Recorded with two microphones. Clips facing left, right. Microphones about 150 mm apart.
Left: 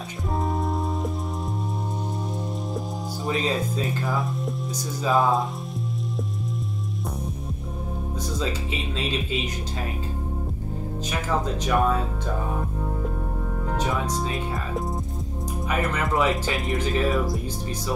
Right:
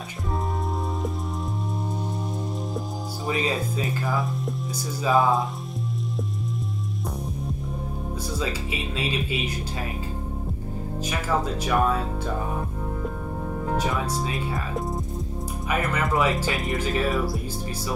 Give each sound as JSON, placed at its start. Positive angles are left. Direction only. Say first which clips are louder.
{"t": 3.3, "sound": "speech", "louder": "left 1 dB", "side_deg": 0}
{"t": 8.9, "sound": "speech", "louder": "even", "side_deg": -10}
{"t": 11.1, "sound": "speech", "louder": "even", "side_deg": -10}
{"t": 13.7, "sound": "speech", "louder": "left 1 dB", "side_deg": -10}